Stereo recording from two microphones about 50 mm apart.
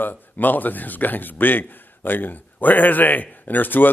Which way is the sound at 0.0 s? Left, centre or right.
Left.